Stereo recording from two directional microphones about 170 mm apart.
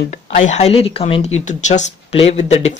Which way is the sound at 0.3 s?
45° left (ahead or behind).